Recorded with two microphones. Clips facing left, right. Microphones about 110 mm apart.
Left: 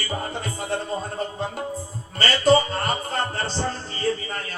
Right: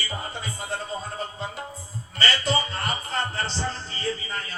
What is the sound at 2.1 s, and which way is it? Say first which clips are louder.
Speech: left 7 dB; 45° left (ahead or behind).